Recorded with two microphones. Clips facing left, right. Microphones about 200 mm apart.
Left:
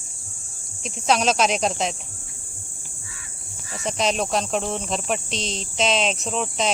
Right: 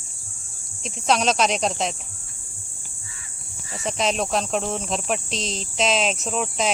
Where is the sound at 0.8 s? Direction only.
Centre (ahead or behind).